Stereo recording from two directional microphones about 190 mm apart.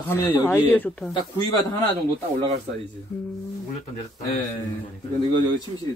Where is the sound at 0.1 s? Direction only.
15° left (ahead or behind).